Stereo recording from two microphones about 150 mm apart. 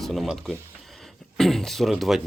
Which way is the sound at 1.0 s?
Centre (ahead or behind).